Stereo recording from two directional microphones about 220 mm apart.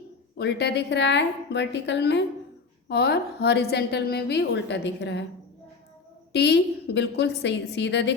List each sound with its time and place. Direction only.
0.3 s a woman's voice: 50° left (ahead or behind)
6.3 s a woman's voice: 50° left (ahead or behind)